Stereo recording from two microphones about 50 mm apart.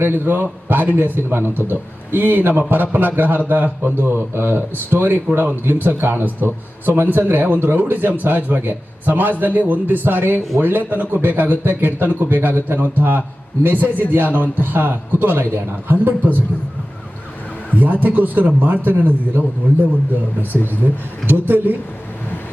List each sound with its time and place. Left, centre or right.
0.0 s a man's voice: right
4.0 s a man's voice: right
17.7 s a man's voice: right
21.2 s a man's voice: right